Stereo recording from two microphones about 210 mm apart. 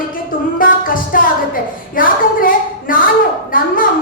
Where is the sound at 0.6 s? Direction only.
40° left (ahead or behind).